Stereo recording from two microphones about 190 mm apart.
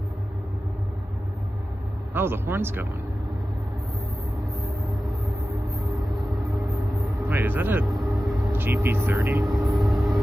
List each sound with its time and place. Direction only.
2.1 s speech: 10° right (ahead or behind)
5.9 s vehicle: centre (ahead or behind)
7.3 s speech: 10° right (ahead or behind)
7.8 s vehicle: centre (ahead or behind)
8.5 s speech: 10° right (ahead or behind)
9.5 s vehicle: centre (ahead or behind)